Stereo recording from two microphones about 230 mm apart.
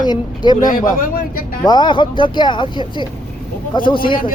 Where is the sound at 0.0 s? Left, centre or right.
Centre.